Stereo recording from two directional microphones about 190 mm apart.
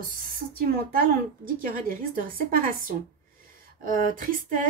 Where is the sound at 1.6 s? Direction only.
45° right (ahead or behind).